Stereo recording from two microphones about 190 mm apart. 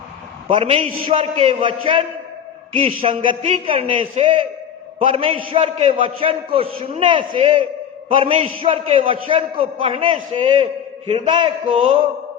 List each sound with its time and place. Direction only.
0.5 s a man's voice: 35° right (ahead or behind)
3.2 s a man's voice: 25° right (ahead or behind)